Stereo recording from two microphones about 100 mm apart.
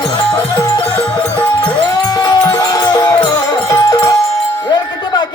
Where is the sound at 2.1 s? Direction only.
40° left (ahead or behind).